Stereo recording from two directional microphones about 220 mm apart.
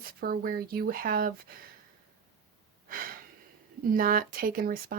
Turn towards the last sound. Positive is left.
turn(degrees=-40)  # may be behind; listen again after turning